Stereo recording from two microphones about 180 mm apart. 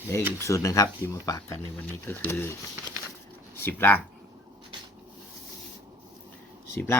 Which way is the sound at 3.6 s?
10° left (ahead or behind).